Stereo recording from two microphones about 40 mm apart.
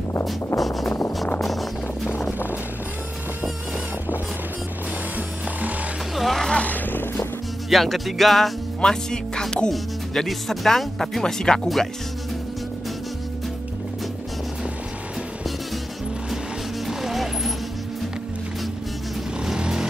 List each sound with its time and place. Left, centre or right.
0.3 s a sound: centre
1.4 s music: centre
5.1 s music: right
6.1 s music: centre
6.5 s vehicle: left
6.9 s music: left
7.7 s music: centre
8.8 s speech: centre
16.8 s music: centre
19.4 s vehicle: centre